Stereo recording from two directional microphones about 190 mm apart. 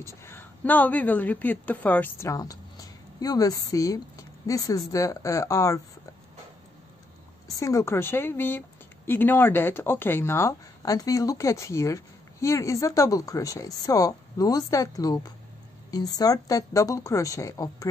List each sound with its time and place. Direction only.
0.0 s a woman's voice: 15° left (ahead or behind)
7.4 s a woman's voice: 15° left (ahead or behind)